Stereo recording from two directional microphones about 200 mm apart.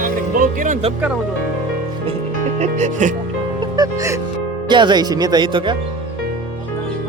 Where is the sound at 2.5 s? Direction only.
35° right (ahead or behind).